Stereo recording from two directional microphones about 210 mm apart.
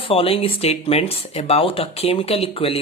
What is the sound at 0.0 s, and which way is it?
Speech, 25° left (ahead or behind).